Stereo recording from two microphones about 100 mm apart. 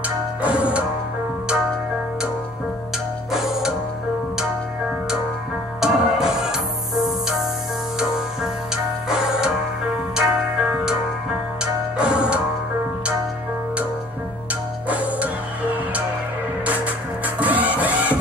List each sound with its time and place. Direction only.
0.4 s music: 15° right (ahead or behind)
3.3 s music: 5° right (ahead or behind)
5.8 s music: 5° right (ahead or behind)
9.1 s music: 5° right (ahead or behind)
14.9 s music: 15° right (ahead or behind)
17.4 s music: 15° right (ahead or behind)